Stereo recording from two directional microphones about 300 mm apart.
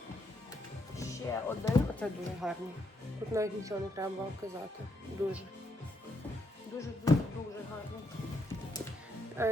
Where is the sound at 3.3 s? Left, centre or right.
Centre.